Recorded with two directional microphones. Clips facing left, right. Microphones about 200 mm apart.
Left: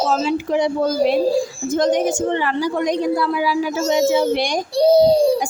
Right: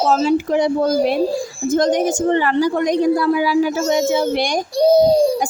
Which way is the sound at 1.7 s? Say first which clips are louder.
Right 1 dB; 45° right (ahead or behind).